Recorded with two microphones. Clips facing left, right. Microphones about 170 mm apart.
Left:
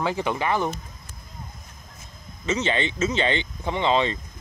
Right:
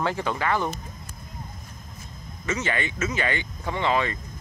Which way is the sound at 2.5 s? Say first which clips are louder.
Left 3 dB; 20° left (ahead or behind).